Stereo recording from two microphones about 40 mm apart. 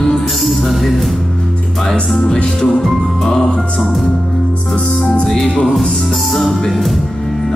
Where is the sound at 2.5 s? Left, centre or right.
Centre.